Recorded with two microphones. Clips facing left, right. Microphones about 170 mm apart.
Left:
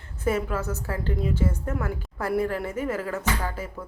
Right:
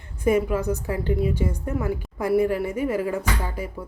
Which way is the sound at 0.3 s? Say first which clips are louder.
Right 5 dB; 15° right (ahead or behind).